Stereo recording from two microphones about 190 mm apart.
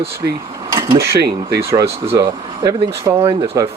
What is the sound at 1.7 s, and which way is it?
Speech, 15° right (ahead or behind).